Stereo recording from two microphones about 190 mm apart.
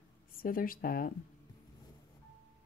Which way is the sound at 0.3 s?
50° left (ahead or behind).